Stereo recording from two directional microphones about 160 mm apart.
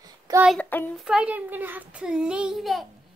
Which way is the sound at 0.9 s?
5° right (ahead or behind).